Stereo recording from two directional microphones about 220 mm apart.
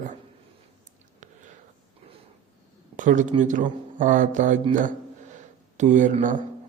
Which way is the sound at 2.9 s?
35° right (ahead or behind).